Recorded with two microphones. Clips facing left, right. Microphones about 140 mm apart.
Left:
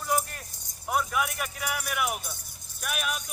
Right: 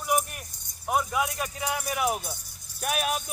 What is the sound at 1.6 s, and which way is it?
Speech, 30° right (ahead or behind).